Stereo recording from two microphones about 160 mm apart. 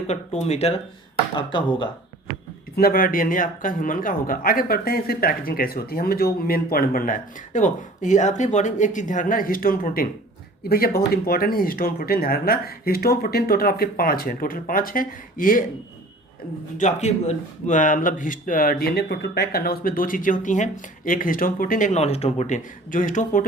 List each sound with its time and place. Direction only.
0.3 s speech: 40° left (ahead or behind)
1.4 s speech: 30° left (ahead or behind)
2.7 s speech: 65° left (ahead or behind)
16.7 s speech: 50° left (ahead or behind)